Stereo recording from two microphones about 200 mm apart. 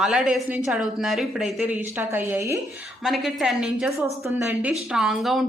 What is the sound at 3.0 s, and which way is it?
A woman's voice, centre (ahead or behind).